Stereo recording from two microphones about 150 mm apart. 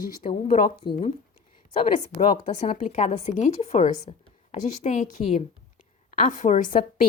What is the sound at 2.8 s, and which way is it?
A woman's voice, 55° left (ahead or behind).